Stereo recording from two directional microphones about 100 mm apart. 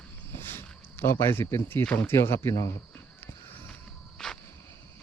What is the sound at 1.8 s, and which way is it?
Speech, 15° left (ahead or behind).